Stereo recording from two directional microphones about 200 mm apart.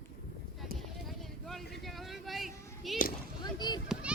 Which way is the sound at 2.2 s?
Centre (ahead or behind).